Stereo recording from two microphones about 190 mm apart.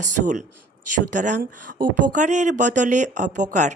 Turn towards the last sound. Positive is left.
turn(degrees=-40)  # may be behind; listen again after turning